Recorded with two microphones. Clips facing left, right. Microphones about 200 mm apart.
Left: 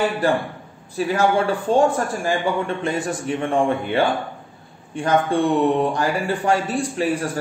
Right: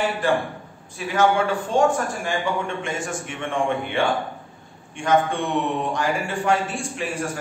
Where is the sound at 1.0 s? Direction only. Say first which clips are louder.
Left 1 dB; 35° left (ahead or behind).